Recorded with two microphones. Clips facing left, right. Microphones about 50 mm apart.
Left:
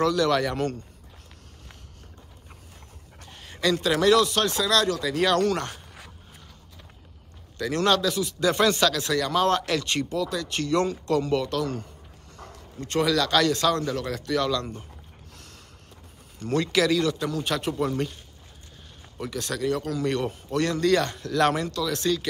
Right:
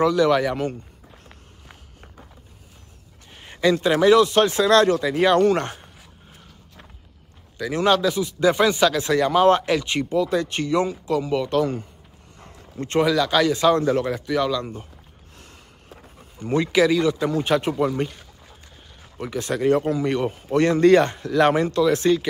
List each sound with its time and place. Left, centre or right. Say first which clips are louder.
0.0 s speech: right 4 dB; centre
3.3 s speech: right 5 dB; right
7.5 s speech: right 3 dB; centre
10.6 s speech: right 2 dB; centre
11.5 s speech: right 6 dB; right
12.8 s speech: right 4 dB; right
13.1 s speech: right 3 dB; centre
13.8 s speech: right 8 dB; right
14.1 s speech: right 3 dB; centre
15.3 s snort: right 3 dB; right
16.3 s speech: right 4 dB; centre
19.1 s speech: right 5 dB; right
19.9 s speech: right 4 dB; centre
20.5 s speech: right 7 dB; right